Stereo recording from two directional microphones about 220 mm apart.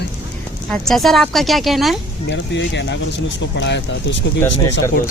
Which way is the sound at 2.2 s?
55° left (ahead or behind).